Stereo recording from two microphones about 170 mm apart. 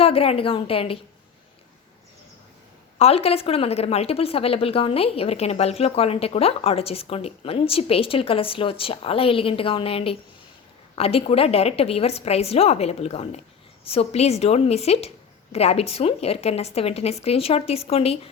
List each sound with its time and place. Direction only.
0.0 s a woman's voice: 35° left (ahead or behind)
3.0 s a woman's voice: 35° left (ahead or behind)